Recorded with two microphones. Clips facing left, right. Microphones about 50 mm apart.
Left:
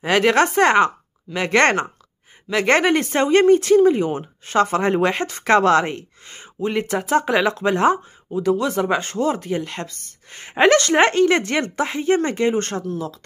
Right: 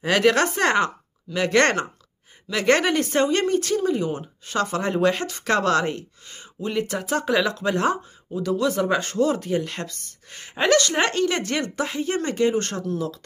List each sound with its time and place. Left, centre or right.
0.0 s speech: centre
3.8 s speech: left
6.2 s speech: left; by 10.5 s centre
10.7 s speech: left
12.8 s speech: centre